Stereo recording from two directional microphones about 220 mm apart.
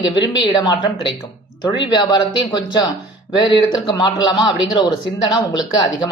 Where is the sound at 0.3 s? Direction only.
20° left (ahead or behind).